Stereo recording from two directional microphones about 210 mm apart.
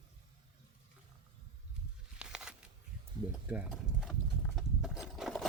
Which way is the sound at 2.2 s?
5° right (ahead or behind).